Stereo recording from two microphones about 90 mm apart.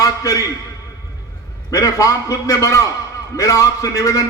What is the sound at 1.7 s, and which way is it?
A man's voice, 40° left (ahead or behind).